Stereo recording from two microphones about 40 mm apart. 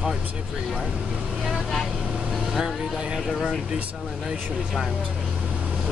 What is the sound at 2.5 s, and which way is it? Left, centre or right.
Speech, centre.